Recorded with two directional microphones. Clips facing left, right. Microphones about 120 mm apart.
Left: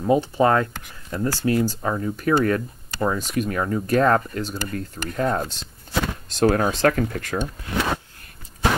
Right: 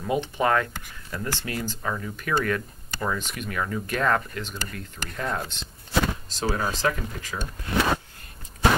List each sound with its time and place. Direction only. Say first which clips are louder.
0.0 s speech: left 6 dB; 35° left (ahead or behind)
6.2 s speech: left 8 dB; 60° left (ahead or behind)